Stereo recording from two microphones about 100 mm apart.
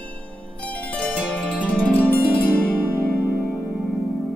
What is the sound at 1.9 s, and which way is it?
Harp, 15° left (ahead or behind).